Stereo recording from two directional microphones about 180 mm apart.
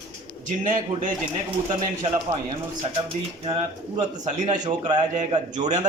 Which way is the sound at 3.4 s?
30° right (ahead or behind).